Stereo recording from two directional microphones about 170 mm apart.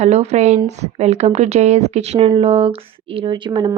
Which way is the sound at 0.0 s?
40° right (ahead or behind).